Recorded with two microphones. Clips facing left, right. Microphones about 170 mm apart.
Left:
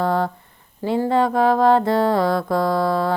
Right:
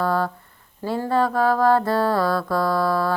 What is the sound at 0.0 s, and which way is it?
Speech, 20° left (ahead or behind).